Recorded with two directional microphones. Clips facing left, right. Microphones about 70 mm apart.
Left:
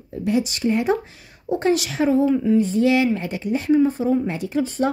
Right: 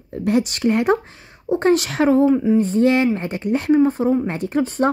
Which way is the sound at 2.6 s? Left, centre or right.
Right.